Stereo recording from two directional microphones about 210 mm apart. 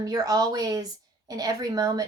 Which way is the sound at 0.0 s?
20° right (ahead or behind).